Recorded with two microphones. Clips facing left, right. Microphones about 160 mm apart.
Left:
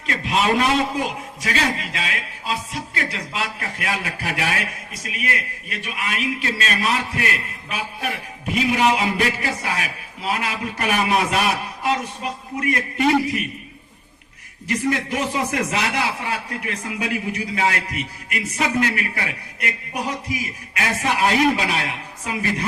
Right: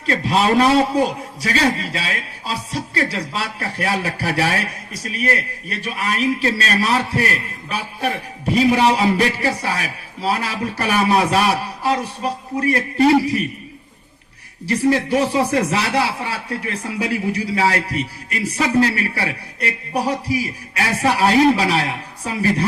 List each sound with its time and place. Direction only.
0.0 s a man's voice: 35° right (ahead or behind)
14.7 s a man's voice: 35° right (ahead or behind)